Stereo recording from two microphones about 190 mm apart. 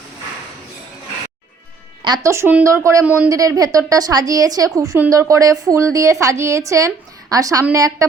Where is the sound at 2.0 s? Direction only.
20° right (ahead or behind).